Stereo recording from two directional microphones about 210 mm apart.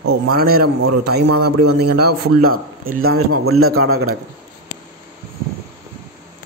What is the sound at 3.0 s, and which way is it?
Speech, 90° right.